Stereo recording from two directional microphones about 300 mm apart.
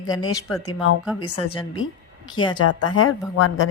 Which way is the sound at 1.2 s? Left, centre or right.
Left.